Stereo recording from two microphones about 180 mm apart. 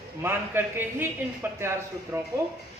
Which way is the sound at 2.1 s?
15° right (ahead or behind).